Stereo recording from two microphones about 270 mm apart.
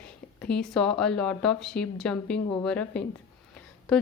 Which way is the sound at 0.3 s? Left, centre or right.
Centre.